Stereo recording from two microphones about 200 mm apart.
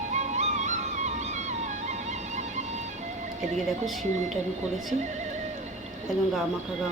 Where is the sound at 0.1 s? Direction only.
35° right (ahead or behind).